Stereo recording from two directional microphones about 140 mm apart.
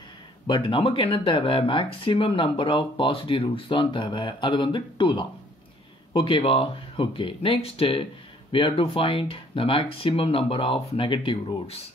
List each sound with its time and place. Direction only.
0.5 s speech: 40° left (ahead or behind)